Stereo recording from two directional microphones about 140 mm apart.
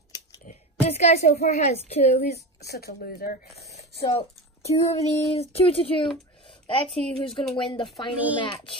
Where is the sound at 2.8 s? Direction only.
90° left.